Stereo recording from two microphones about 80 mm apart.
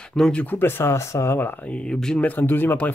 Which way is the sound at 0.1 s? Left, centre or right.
Centre.